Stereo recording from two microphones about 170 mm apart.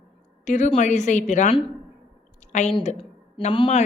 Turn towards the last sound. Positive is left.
turn(degrees=35)  # may be behind; listen again after turning